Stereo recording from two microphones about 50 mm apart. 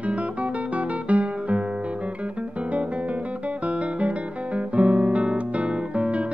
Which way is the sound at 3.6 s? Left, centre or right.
Right.